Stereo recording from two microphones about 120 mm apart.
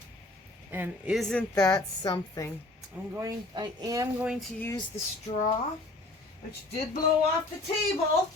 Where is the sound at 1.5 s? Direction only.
25° left (ahead or behind).